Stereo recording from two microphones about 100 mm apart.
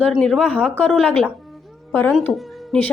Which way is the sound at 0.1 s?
5° left (ahead or behind).